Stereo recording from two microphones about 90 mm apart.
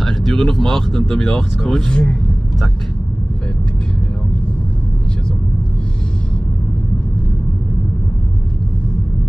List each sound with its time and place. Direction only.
0.0 s speech: 5° left (ahead or behind)